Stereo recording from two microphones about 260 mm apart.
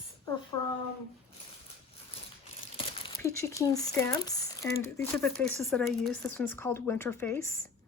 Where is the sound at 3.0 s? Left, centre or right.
Centre.